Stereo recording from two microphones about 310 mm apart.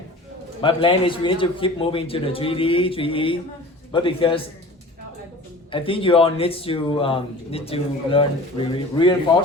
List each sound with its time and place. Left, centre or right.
0.6 s speech: centre
5.7 s speech: centre